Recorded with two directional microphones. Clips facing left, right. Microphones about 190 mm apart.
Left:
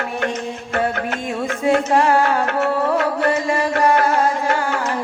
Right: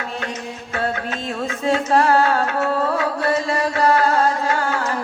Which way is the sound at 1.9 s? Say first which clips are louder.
Right 3 dB; 15° left (ahead or behind).